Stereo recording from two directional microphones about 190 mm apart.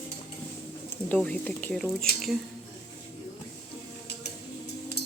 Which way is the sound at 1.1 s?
5° left (ahead or behind).